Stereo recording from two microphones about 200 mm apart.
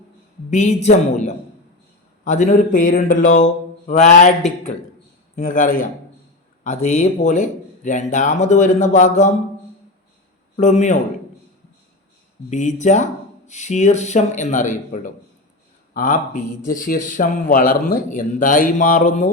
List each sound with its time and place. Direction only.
0.5 s speech: 35° left (ahead or behind)
10.6 s speech: 35° left (ahead or behind)
12.5 s speech: 35° left (ahead or behind)